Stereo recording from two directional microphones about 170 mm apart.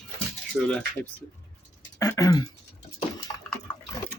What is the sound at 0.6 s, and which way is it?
Speech, 5° left (ahead or behind).